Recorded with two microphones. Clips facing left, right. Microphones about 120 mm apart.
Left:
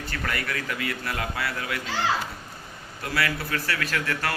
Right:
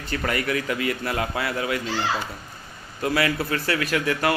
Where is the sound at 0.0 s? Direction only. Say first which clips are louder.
Right 5 dB; 20° right (ahead or behind).